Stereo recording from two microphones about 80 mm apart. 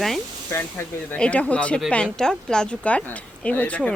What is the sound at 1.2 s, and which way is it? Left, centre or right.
A woman's voice, centre.